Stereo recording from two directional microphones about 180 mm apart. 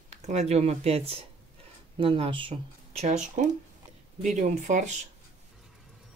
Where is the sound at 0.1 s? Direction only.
40° right (ahead or behind).